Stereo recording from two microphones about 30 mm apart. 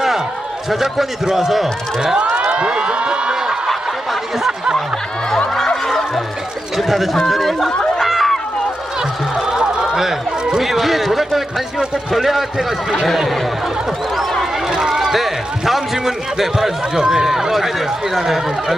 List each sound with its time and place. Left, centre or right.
0.7 s speech: centre
2.1 s a sound: right
3.7 s a sound: centre
5.8 s music: centre
6.7 s a man's voice: centre
8.0 s run: centre
9.0 s music: centre
9.6 s a sound: right
9.9 s chatter: centre
10.6 s a man's voice: centre
14.7 s speech: centre
15.0 s a man's voice: centre
16.9 s speech: right
17.5 s speech: centre